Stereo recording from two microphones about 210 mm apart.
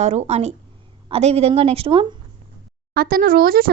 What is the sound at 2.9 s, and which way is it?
Speech, 45° right (ahead or behind).